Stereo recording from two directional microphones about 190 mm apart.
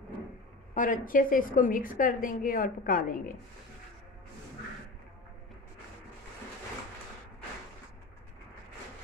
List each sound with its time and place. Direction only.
0.7 s a woman's voice: 45° left (ahead or behind)